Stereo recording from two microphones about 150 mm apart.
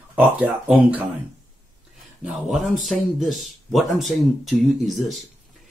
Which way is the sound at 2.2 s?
5° right (ahead or behind).